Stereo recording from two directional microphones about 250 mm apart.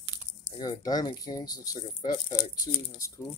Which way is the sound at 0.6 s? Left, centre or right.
Centre.